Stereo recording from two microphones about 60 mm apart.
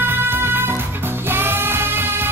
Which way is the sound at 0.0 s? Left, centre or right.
Right.